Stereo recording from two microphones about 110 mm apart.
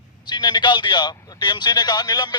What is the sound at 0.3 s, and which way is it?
A man's voice, 40° left (ahead or behind).